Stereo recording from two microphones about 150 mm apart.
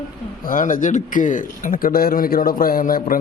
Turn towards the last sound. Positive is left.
turn(degrees=70)  # may be behind; listen again after turning